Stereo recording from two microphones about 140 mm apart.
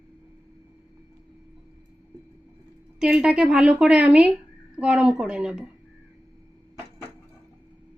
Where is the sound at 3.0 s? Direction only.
5° right (ahead or behind).